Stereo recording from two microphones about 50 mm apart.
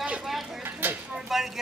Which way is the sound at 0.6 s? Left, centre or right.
Right.